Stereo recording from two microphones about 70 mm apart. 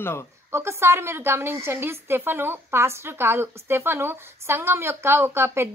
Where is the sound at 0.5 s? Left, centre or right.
Right.